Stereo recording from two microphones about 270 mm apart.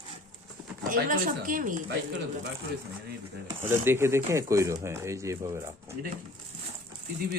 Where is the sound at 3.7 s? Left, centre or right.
Centre.